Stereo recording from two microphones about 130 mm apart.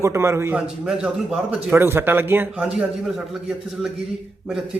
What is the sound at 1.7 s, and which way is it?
Speech, 20° right (ahead or behind).